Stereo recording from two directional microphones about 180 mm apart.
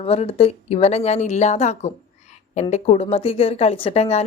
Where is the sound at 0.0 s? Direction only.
35° left (ahead or behind).